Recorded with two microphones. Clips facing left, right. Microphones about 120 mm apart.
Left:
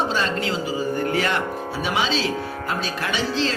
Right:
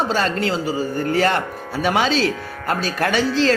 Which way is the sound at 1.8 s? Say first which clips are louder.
Right 6 dB; 50° right (ahead or behind).